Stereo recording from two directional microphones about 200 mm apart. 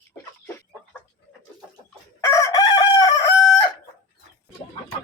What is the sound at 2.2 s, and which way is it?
Chicken, 15° left (ahead or behind).